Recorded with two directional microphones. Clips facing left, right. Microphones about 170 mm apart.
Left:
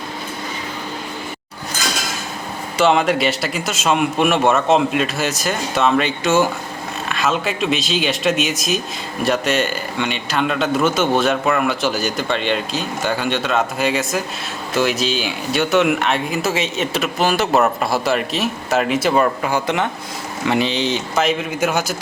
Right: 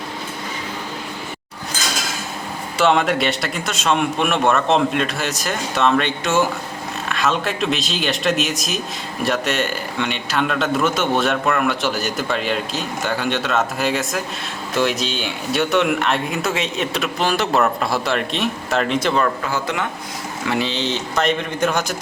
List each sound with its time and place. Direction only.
2.7 s speech: centre (ahead or behind)
19.2 s speech: 20° left (ahead or behind)